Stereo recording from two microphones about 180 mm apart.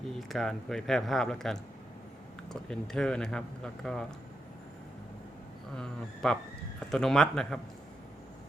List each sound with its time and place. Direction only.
0.1 s speech: centre (ahead or behind)
5.7 s speech: 5° left (ahead or behind)